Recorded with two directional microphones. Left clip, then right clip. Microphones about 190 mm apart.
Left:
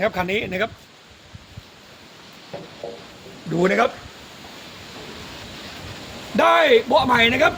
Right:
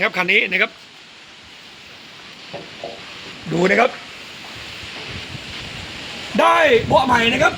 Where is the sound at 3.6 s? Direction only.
40° right (ahead or behind).